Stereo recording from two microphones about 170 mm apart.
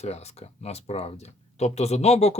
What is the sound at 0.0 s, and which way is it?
Speech, 40° left (ahead or behind).